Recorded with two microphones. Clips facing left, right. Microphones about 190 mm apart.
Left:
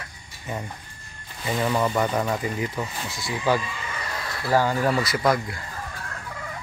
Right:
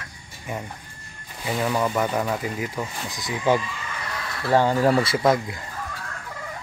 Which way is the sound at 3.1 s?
20° right (ahead or behind).